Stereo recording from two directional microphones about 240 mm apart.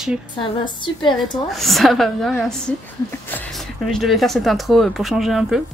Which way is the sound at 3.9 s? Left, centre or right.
Centre.